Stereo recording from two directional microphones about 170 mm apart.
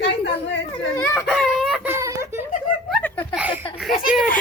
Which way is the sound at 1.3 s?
Centre (ahead or behind).